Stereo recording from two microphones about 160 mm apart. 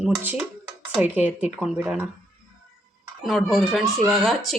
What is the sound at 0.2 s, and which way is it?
Speech, 10° right (ahead or behind).